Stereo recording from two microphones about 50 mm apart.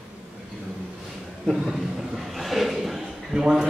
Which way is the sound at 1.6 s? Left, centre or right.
Centre.